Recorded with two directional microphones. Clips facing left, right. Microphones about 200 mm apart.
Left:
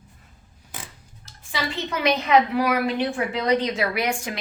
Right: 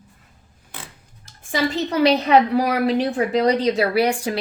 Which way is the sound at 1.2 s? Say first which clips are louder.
Right 9 dB; 50° right (ahead or behind).